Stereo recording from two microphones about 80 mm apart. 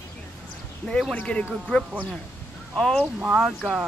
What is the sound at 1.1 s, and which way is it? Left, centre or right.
Speech, centre.